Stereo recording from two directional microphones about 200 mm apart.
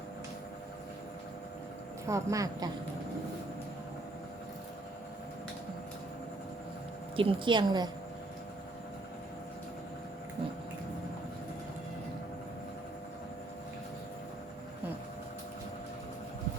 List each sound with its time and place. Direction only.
2.0 s speech: 15° right (ahead or behind)
7.2 s speech: 25° right (ahead or behind)